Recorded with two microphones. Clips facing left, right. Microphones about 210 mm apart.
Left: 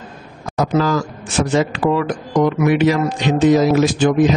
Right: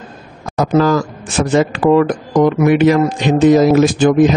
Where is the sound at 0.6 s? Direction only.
50° right (ahead or behind).